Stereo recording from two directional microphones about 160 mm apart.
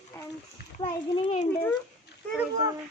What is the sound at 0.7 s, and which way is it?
Speech, 35° left (ahead or behind).